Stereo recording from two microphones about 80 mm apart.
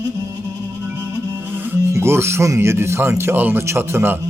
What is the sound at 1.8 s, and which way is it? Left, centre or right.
Speech, right.